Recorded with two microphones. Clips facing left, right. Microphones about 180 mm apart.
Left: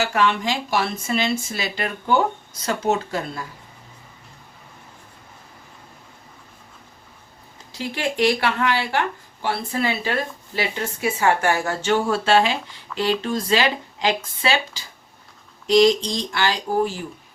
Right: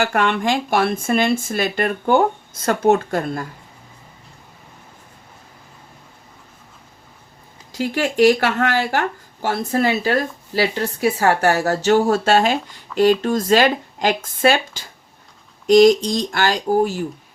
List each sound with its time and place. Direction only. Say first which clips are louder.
0.0 s speech: right 2 dB; 55° right (ahead or behind)
7.7 s speech: right 5 dB; 45° right (ahead or behind)